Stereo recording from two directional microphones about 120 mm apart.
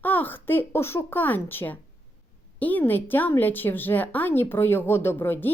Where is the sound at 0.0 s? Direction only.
15° left (ahead or behind).